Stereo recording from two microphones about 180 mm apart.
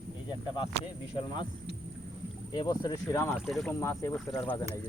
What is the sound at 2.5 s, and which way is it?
Speech, 20° left (ahead or behind).